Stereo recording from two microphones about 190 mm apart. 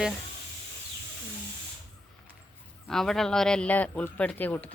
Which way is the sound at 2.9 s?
Centre (ahead or behind).